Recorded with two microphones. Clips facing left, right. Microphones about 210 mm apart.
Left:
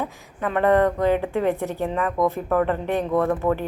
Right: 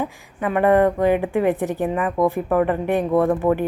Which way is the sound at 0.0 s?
10° right (ahead or behind).